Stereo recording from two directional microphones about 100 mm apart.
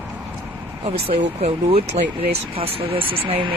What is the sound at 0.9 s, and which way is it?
Speech, 80° right.